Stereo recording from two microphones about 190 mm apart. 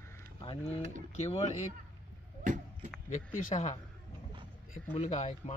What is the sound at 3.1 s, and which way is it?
Speech, 40° left (ahead or behind).